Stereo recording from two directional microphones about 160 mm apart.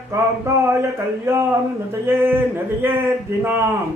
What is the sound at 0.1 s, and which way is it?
Speech, 15° right (ahead or behind).